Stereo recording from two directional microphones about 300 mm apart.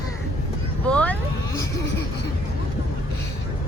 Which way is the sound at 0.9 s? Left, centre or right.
Centre.